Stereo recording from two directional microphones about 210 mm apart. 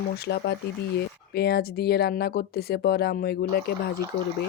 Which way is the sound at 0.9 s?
50° left (ahead or behind).